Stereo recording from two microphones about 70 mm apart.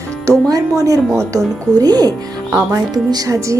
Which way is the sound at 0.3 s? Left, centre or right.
Right.